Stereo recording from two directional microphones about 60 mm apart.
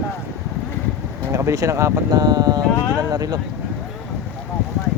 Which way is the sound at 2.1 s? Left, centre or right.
Right.